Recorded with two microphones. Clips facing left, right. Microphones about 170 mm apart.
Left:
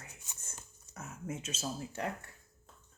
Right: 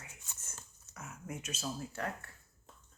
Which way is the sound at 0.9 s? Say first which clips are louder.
Left 3 dB; 25° left (ahead or behind).